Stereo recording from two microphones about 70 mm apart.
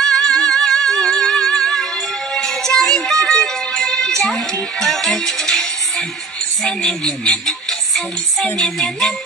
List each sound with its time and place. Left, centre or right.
0.0 s music: centre
6.8 s speech: left
7.2 s music: centre